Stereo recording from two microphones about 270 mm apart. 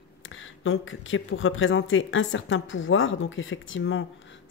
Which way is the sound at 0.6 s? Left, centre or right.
Left.